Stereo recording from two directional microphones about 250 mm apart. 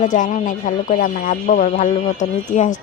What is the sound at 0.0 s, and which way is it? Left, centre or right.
Speech, left.